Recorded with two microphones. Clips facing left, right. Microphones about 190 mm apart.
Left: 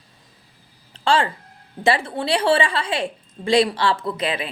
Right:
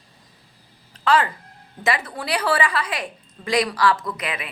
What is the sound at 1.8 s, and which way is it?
A woman's voice, 30° left (ahead or behind).